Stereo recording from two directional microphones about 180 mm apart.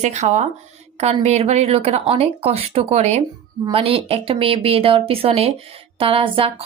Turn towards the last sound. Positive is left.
turn(degrees=-30)  # may be behind; listen again after turning